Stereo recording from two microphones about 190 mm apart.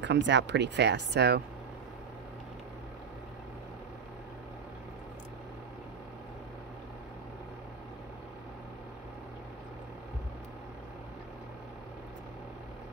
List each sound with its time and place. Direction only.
0.0 s speech: 70° right (ahead or behind)